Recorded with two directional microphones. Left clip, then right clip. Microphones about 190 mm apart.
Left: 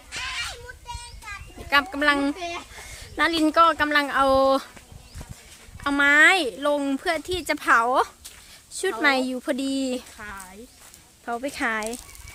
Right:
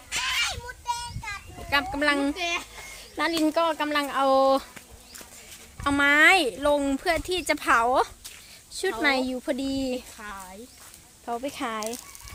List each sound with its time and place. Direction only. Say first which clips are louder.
0.1 s a sound: right 4 dB; 30° right (ahead or behind)
1.7 s speech: left 3 dB; 15° left (ahead or behind)
2.3 s speech: right 3 dB; 10° right (ahead or behind)
2.9 s speech: left 4 dB; 10° left (ahead or behind)
5.8 s speech: left 2 dB; 5° left (ahead or behind)
10.2 s a sound: left 1 dB; centre (ahead or behind)
11.3 s speech: left 4 dB; 15° left (ahead or behind)